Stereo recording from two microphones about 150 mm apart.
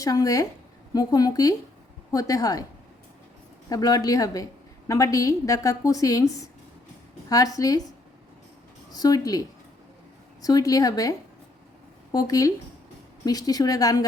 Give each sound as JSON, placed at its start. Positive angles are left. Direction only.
{"t": 0.0, "sound": "a woman's voice", "side_deg": 25}
{"t": 3.7, "sound": "a woman's voice", "side_deg": 25}
{"t": 8.9, "sound": "a woman's voice", "side_deg": 25}
{"t": 12.1, "sound": "a woman's voice", "side_deg": 25}